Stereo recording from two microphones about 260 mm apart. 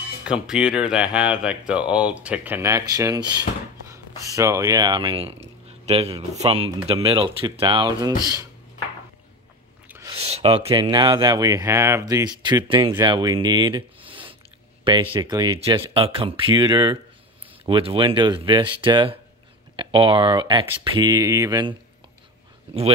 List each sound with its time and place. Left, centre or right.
0.3 s speech: centre
9.8 s a sound: centre
10.1 s speech: right